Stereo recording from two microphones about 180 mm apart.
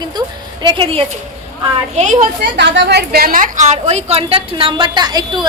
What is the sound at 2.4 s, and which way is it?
A woman's voice, 75° right (ahead or behind).